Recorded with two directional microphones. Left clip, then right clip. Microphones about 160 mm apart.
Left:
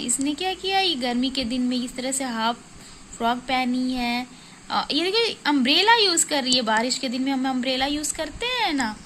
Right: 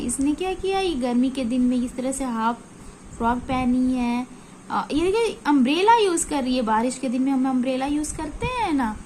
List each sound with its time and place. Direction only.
0.3 s a woman's voice: 20° left (ahead or behind)